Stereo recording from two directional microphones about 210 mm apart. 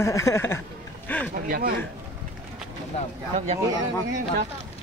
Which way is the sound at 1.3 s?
45° right (ahead or behind).